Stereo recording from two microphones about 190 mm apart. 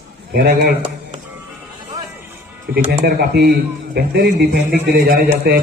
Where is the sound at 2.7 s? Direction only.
50° right (ahead or behind).